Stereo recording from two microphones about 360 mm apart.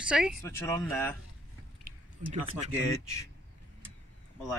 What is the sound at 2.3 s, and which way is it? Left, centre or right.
Speech, centre.